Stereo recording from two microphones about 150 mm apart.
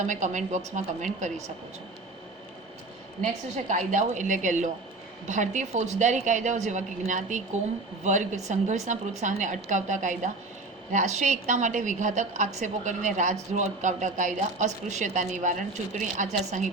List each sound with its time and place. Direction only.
0.0 s a woman's voice: 55° right (ahead or behind)
3.7 s a woman's voice: 55° right (ahead or behind)